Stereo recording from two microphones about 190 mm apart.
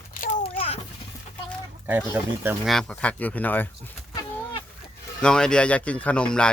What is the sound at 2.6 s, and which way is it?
Speech, 5° left (ahead or behind).